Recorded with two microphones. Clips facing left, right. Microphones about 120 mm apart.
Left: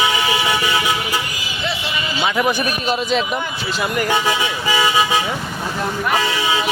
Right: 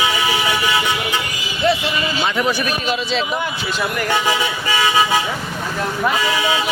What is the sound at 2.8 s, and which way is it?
Speech, 45° left (ahead or behind).